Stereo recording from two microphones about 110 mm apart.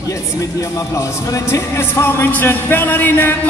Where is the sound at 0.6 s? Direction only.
30° left (ahead or behind).